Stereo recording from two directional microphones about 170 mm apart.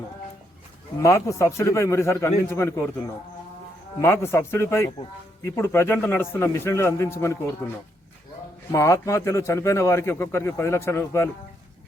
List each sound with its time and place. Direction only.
0.9 s a man's voice: 15° left (ahead or behind)
4.0 s a man's voice: 15° left (ahead or behind)
8.7 s a man's voice: 15° left (ahead or behind)